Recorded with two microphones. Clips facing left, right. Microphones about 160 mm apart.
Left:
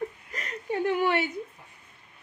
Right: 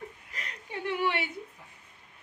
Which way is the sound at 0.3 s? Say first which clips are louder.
Left 10 dB; 45° left (ahead or behind).